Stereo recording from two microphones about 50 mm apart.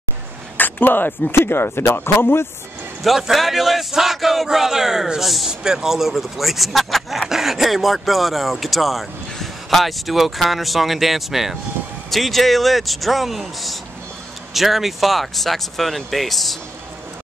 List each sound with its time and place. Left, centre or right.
0.6 s speech: left
1.3 s speech: left
3.0 s speech: centre